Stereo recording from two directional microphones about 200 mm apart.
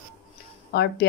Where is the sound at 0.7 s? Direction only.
55° left (ahead or behind).